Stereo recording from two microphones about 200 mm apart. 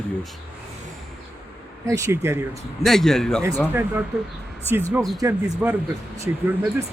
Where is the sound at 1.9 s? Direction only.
15° right (ahead or behind).